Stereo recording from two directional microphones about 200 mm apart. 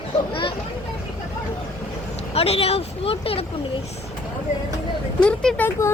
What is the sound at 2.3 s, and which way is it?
Speech, 30° left (ahead or behind).